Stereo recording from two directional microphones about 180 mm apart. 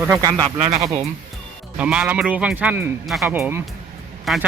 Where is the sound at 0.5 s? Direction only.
35° right (ahead or behind).